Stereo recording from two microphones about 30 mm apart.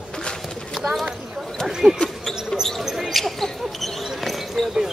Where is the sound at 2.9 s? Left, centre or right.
Centre.